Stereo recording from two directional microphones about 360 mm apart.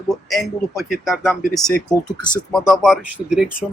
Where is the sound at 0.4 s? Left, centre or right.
Centre.